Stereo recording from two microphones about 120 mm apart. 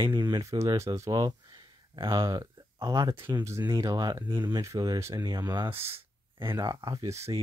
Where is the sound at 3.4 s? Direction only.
25° right (ahead or behind).